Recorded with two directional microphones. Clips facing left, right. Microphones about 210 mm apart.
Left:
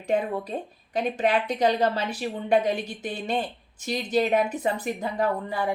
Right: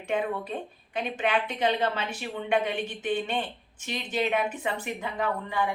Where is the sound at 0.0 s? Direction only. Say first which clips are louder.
Left 3 dB; 35° left (ahead or behind).